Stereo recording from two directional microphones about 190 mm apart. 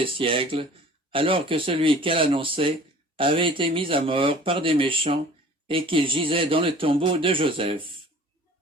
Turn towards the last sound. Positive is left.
turn(degrees=-25)  # may be behind; listen again after turning